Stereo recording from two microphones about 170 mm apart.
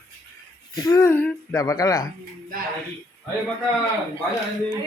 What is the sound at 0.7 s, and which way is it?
A woman's voice, 20° left (ahead or behind).